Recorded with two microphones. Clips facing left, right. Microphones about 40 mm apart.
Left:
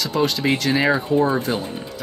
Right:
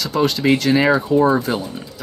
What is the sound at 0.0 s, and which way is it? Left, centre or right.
Speech, centre.